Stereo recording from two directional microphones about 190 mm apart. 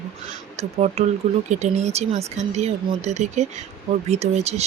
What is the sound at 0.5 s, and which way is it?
Speech, 35° right (ahead or behind).